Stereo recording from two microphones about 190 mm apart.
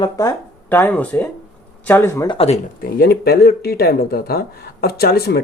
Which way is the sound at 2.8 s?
50° left (ahead or behind).